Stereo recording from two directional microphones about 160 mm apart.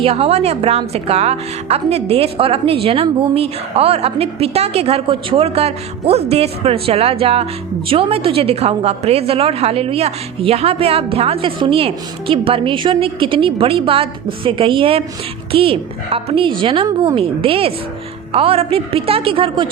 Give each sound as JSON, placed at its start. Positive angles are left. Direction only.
{"t": 0.0, "sound": "a woman's voice", "side_deg": -40}